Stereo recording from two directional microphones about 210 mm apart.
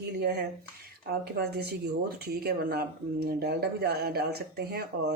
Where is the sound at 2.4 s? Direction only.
45° right (ahead or behind).